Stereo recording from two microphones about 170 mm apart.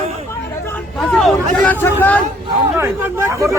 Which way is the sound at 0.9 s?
Centre (ahead or behind).